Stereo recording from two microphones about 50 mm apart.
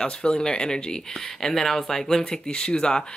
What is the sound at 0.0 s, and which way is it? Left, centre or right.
Speech, centre.